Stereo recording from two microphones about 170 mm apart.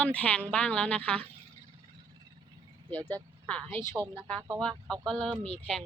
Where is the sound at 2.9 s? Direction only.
10° left (ahead or behind).